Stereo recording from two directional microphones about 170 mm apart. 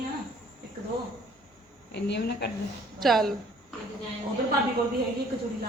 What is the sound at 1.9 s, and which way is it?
Speech, 75° left (ahead or behind).